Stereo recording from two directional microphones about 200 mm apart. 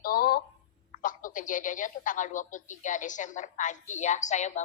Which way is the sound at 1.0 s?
40° left (ahead or behind).